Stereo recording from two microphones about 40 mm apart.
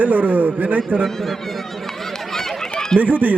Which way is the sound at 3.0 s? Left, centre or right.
Right.